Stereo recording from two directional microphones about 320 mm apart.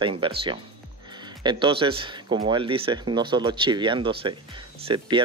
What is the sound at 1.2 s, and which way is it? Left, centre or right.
Speech, centre.